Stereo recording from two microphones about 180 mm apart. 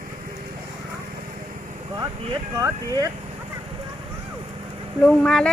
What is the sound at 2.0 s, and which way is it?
Speech, 20° right (ahead or behind).